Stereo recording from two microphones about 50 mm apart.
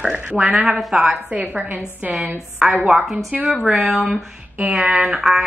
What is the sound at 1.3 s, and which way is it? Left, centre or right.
Speech, right.